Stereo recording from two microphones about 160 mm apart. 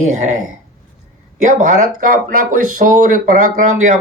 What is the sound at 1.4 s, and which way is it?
Speech, 55° right (ahead or behind).